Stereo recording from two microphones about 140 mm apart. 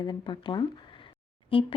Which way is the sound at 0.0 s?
30° left (ahead or behind).